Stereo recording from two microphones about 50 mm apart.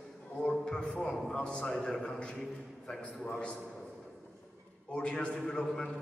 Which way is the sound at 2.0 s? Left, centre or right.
Left.